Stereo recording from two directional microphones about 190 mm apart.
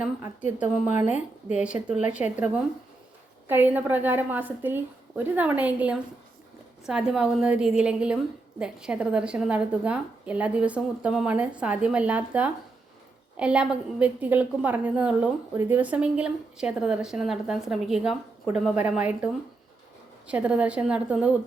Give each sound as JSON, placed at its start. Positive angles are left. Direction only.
{"t": 0.0, "sound": "a woman's voice", "side_deg": -10}
{"t": 1.0, "sound": "a woman's voice", "side_deg": 40}
{"t": 1.5, "sound": "a woman's voice", "side_deg": -5}
{"t": 3.5, "sound": "a woman's voice", "side_deg": -10}